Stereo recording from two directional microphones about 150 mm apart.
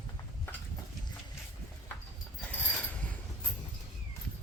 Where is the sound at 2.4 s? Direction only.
10° left (ahead or behind).